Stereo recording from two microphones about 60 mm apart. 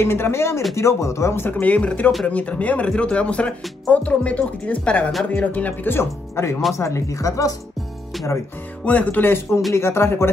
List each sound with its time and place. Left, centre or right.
0.0 s speech: left
1.6 s speech: left
5.9 s speech: left
6.8 s speech: left
8.8 s speech: left